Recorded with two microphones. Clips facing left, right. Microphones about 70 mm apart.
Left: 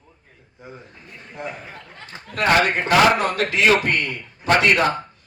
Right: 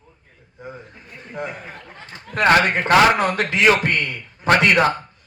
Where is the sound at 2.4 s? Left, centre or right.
Right.